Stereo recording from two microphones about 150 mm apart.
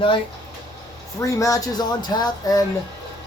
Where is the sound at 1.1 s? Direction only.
20° left (ahead or behind).